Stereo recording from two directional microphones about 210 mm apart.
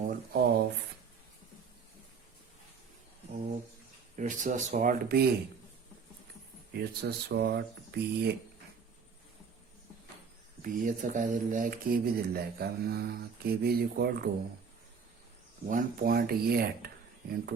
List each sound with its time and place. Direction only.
0.1 s a sound: 50° right (ahead or behind)
4.2 s speech: 35° right (ahead or behind)
6.7 s speech: 50° right (ahead or behind)
10.6 s speech: 40° right (ahead or behind)
15.6 s speech: 40° right (ahead or behind)